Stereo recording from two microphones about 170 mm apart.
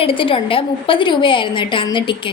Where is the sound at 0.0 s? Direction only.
30° left (ahead or behind).